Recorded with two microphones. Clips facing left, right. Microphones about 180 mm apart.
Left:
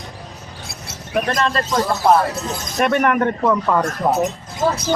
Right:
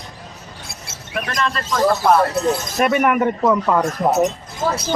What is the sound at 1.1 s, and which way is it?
Speech, 35° left (ahead or behind).